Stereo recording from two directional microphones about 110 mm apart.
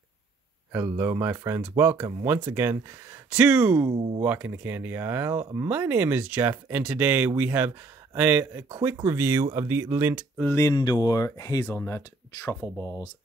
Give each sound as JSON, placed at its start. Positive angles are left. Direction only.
{"t": 0.7, "sound": "speech", "side_deg": -25}
{"t": 3.3, "sound": "speech", "side_deg": -10}
{"t": 10.4, "sound": "speech", "side_deg": 25}
{"t": 10.7, "sound": "speech", "side_deg": 40}